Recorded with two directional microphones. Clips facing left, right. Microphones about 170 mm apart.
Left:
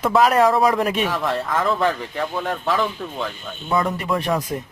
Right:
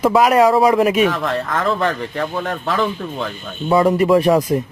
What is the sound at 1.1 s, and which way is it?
Speech, 10° left (ahead or behind).